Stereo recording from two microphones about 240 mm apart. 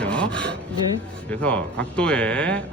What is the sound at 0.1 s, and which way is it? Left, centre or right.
Rub, centre.